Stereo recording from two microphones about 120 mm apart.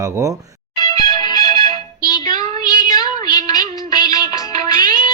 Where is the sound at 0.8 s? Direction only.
30° left (ahead or behind).